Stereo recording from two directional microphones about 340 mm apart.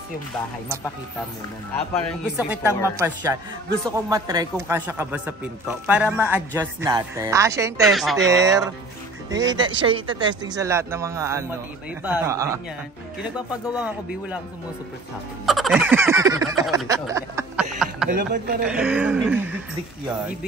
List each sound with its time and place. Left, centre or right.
2.0 s a man's voice: centre
15.4 s a sound: centre
18.1 s a woman's voice: right
18.6 s speech: centre